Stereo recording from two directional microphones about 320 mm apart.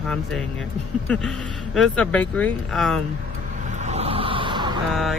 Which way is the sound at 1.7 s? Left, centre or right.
Centre.